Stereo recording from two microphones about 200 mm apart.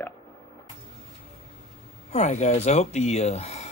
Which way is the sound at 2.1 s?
35° left (ahead or behind).